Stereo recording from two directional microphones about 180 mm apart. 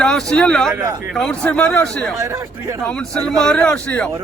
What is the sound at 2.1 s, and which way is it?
Speech, 15° right (ahead or behind).